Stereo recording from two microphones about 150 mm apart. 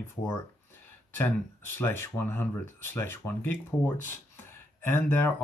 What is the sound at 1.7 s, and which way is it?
Speech, 15° left (ahead or behind).